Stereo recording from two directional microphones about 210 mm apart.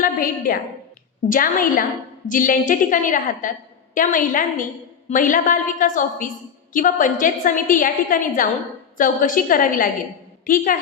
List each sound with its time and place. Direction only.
0.0 s a woman's voice: 40° left (ahead or behind)